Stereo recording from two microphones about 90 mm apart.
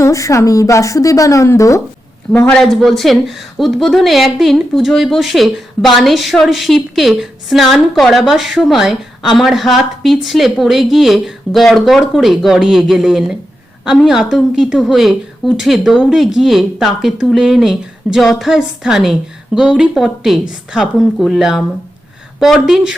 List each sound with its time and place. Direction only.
0.0 s speech: 35° left (ahead or behind)
2.5 s speech: 5° left (ahead or behind)